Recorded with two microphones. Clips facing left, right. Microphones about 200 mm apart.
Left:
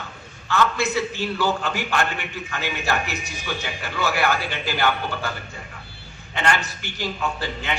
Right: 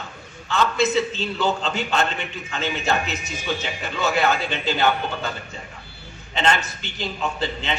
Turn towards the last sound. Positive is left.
turn(degrees=-20)  # may be behind; listen again after turning